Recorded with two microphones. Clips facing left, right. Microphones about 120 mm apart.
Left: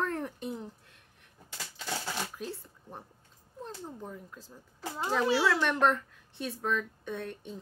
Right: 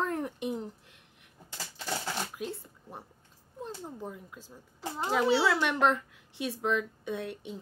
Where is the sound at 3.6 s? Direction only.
15° right (ahead or behind).